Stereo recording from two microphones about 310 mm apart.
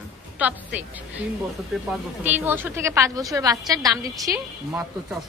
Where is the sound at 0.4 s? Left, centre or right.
Centre.